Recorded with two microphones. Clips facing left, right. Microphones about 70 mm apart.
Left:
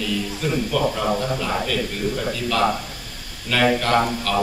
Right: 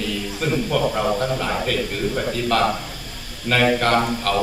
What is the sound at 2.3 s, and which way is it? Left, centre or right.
A man's voice, right.